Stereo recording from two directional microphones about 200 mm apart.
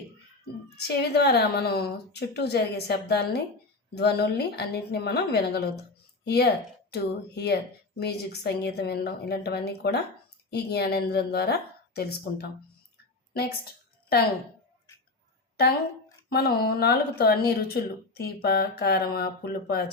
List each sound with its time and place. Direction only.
0.4 s a woman's voice: 55° left (ahead or behind)
16.3 s a woman's voice: 50° left (ahead or behind)